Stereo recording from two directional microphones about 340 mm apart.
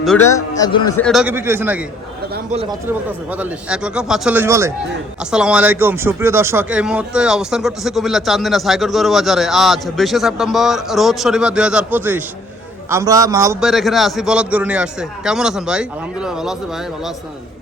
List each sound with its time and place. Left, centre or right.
0.0 s speech: centre
2.3 s a man's voice: centre
3.3 s speech: centre